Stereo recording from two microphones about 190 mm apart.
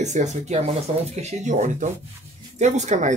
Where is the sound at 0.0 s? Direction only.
40° right (ahead or behind).